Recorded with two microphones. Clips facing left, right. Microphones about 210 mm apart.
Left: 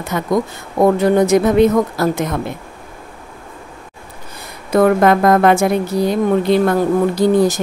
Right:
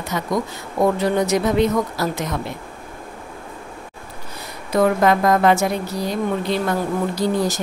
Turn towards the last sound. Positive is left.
turn(degrees=55)  # may be behind; listen again after turning